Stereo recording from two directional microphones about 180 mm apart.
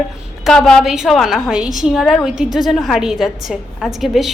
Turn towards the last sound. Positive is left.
turn(degrees=0)  # may be behind; listen again after turning